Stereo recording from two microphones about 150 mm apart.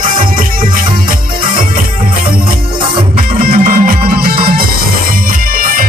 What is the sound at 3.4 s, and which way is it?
Music, 65° right (ahead or behind).